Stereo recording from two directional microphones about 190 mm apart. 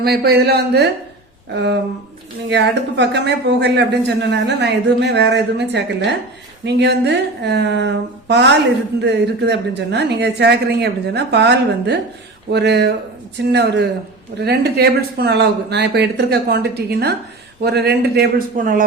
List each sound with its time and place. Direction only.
0.0 s speech: 55° right (ahead or behind)
2.5 s speech: 65° right (ahead or behind)
14.3 s speech: 60° right (ahead or behind)